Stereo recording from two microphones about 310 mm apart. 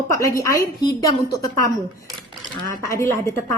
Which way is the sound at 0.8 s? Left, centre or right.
Centre.